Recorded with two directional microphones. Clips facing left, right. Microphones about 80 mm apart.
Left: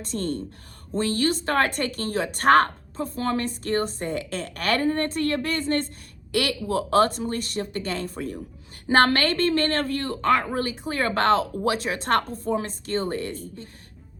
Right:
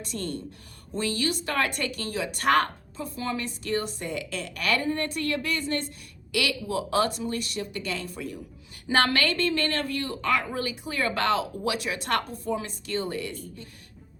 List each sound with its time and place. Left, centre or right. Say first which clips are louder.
0.0 s speech: left 5 dB; left